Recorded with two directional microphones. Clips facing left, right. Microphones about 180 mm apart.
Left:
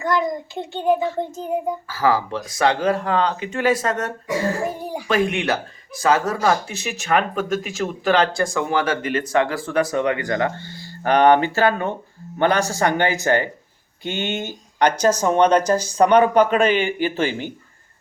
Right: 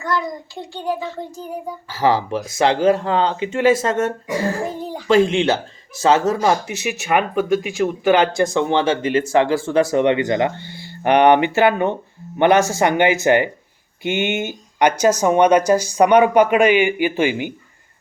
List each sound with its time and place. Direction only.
0.0 s a child's voice: 20° left (ahead or behind)
1.9 s speech: 25° right (ahead or behind)
4.7 s speech: 10° left (ahead or behind)
5.0 s speech: 25° right (ahead or behind)